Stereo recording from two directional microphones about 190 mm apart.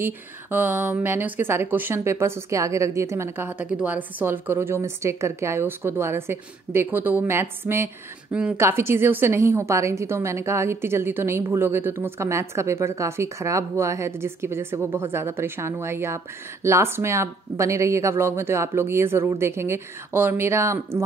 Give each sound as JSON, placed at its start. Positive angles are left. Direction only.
{"t": 0.0, "sound": "a woman's voice", "side_deg": -10}